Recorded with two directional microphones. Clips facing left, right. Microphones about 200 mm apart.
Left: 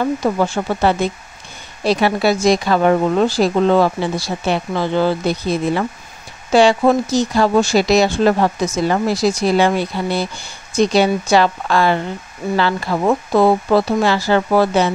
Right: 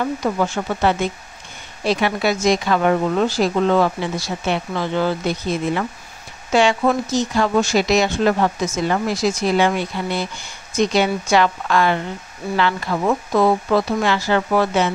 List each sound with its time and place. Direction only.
0.2 s a woman's voice: 35° left (ahead or behind)